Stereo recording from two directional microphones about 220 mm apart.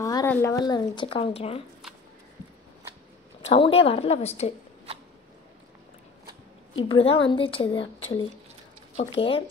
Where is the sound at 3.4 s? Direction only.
25° left (ahead or behind).